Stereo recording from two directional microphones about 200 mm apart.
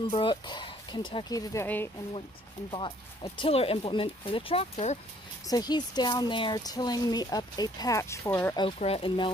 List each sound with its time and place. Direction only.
0.1 s speech: 25° left (ahead or behind)
2.7 s speech: 25° left (ahead or behind)
5.5 s speech: 20° left (ahead or behind)
8.5 s speech: 30° left (ahead or behind)